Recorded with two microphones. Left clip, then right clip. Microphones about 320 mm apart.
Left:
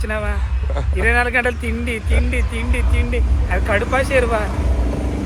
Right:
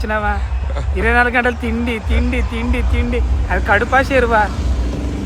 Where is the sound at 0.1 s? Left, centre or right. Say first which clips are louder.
Right 7 dB; right.